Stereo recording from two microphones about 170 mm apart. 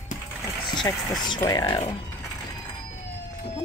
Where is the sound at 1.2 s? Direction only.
25° left (ahead or behind).